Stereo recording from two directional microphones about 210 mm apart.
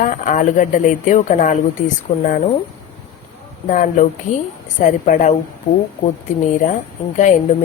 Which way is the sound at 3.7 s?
40° left (ahead or behind).